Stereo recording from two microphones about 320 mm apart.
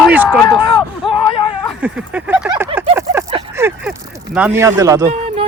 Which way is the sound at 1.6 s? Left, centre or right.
Centre.